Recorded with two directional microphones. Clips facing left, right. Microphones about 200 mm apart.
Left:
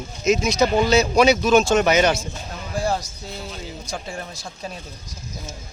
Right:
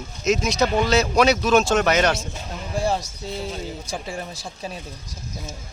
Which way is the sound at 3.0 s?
25° right (ahead or behind).